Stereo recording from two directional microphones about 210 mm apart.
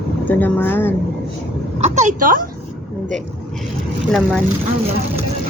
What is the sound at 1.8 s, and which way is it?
Speech, 35° right (ahead or behind).